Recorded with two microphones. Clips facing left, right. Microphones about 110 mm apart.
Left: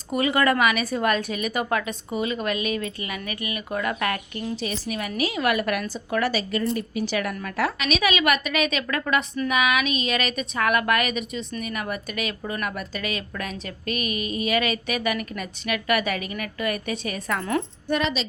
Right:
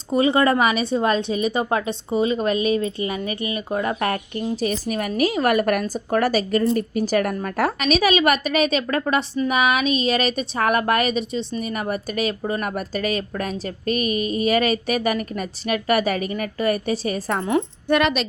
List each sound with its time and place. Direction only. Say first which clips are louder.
0.1 s a woman's voice: right 4 dB; 30° right (ahead or behind)
4.6 s a woman's voice: right 6 dB; 45° right (ahead or behind)
17.8 s speech: right 7 dB; 65° right (ahead or behind)